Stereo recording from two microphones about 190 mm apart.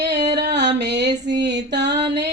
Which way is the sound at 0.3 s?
65° right (ahead or behind).